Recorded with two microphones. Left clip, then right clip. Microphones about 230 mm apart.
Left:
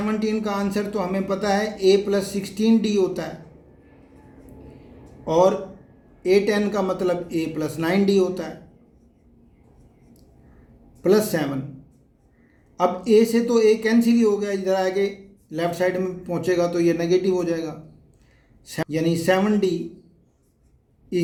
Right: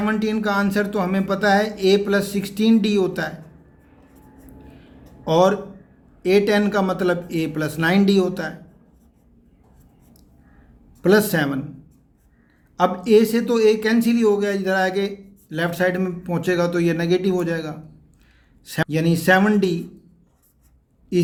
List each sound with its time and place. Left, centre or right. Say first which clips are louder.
0.0 s a man's voice: right 2 dB; right
5.2 s a man's voice: right 1 dB; right
11.0 s a man's voice: right 2 dB; right
12.8 s a man's voice: right 2 dB; right